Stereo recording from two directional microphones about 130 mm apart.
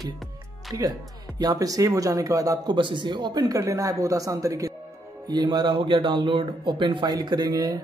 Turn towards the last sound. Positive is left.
turn(degrees=-30)  # may be behind; listen again after turning